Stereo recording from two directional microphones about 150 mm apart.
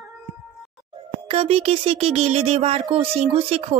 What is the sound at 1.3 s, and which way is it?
Speech, 40° right (ahead or behind).